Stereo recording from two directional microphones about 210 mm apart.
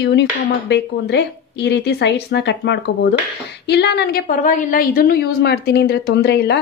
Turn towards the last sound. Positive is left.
turn(degrees=55)  # may be behind; listen again after turning